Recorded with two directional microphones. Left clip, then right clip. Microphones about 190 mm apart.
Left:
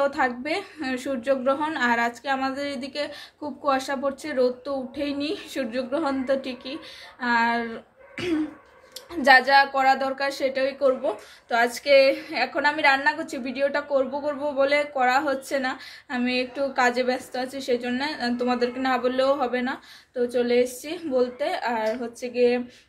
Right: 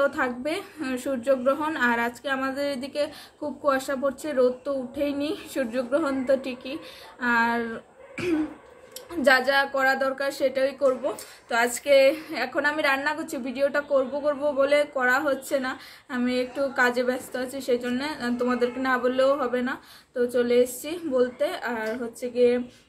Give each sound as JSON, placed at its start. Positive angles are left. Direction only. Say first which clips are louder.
{"t": 0.0, "sound": "a woman's voice", "louder": "left 1 dB", "side_deg": 10}